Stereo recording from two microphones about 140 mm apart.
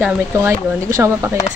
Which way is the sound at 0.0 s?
20° right (ahead or behind).